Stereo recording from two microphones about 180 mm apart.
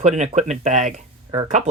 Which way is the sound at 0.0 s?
40° right (ahead or behind).